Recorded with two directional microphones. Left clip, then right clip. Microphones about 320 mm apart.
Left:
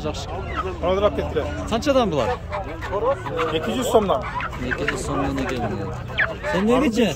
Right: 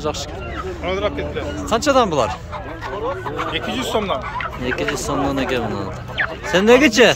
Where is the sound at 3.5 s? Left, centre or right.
Left.